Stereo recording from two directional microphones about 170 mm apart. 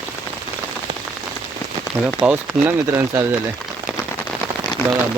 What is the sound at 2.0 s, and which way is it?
Speech, 10° right (ahead or behind).